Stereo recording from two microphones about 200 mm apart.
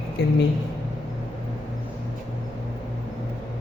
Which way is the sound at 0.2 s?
55° left (ahead or behind).